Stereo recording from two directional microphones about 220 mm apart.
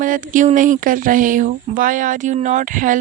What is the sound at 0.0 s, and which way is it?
A woman's voice, 35° right (ahead or behind).